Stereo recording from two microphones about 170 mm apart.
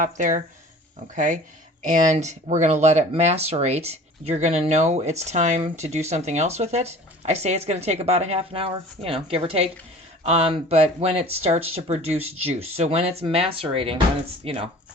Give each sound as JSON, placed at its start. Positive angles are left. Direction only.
{"t": 0.0, "sound": "speech", "side_deg": -50}